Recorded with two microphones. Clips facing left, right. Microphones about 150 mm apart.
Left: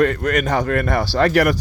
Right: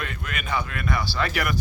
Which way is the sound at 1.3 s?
90° left.